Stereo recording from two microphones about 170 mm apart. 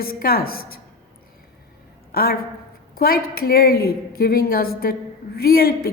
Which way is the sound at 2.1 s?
65° left (ahead or behind).